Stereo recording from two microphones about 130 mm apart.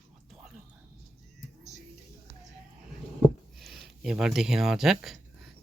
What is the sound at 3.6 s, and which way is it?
Speech, centre (ahead or behind).